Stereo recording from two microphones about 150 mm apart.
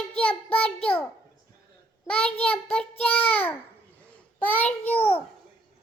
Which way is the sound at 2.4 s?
10° left (ahead or behind).